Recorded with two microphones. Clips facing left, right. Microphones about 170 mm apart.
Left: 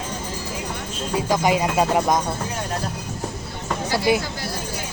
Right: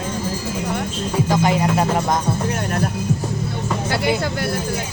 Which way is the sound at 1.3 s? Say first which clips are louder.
Right 1 dB; 15° left (ahead or behind).